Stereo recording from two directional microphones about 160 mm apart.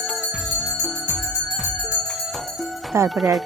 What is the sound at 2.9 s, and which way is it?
Music, 15° right (ahead or behind).